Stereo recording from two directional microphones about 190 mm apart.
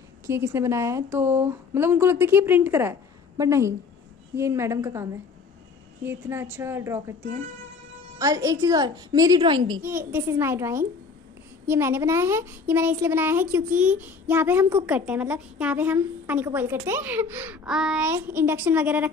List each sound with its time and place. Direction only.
0.3 s a woman's voice: 15° right (ahead or behind)
6.0 s a woman's voice: 10° right (ahead or behind)
8.2 s a woman's voice: 15° right (ahead or behind)
9.8 s a woman's voice: 10° right (ahead or behind)